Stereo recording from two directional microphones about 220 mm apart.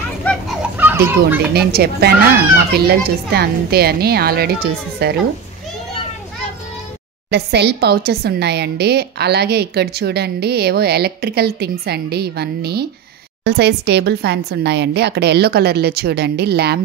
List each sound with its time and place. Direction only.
0.6 s children playing: 10° right (ahead or behind)
1.5 s a woman's voice: 45° right (ahead or behind)
7.2 s a woman's voice: 50° right (ahead or behind)